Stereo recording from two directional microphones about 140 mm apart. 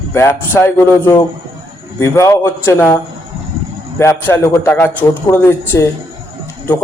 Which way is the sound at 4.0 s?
20° left (ahead or behind).